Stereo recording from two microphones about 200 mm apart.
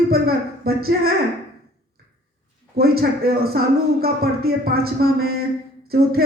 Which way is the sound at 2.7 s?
50° right (ahead or behind).